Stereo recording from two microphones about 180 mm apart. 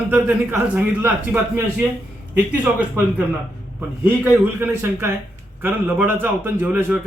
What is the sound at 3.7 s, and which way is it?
A man's voice, 10° right (ahead or behind).